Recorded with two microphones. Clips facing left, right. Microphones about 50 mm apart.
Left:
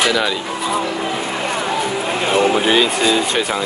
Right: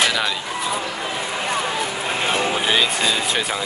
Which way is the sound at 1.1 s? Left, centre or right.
Left.